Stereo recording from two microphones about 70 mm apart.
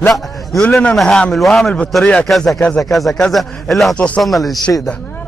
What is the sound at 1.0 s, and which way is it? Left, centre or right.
Speech, centre.